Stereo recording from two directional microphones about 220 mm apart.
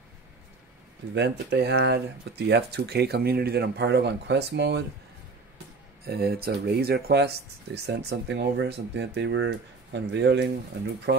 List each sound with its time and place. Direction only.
1.1 s speech: 50° right (ahead or behind)
6.0 s speech: 45° right (ahead or behind)